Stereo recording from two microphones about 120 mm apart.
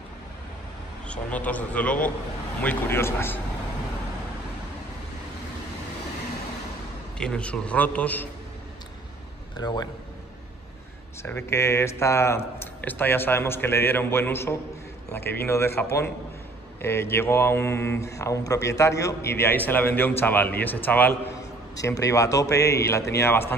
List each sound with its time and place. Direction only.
1.0 s a man's voice: 10° left (ahead or behind)
7.2 s a man's voice: 10° left (ahead or behind)
9.6 s a man's voice: 35° left (ahead or behind)
11.2 s speech: 20° left (ahead or behind)
16.8 s speech: 20° left (ahead or behind)
21.7 s speech: 30° left (ahead or behind)